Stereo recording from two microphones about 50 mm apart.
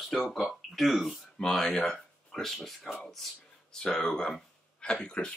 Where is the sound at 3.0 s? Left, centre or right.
Centre.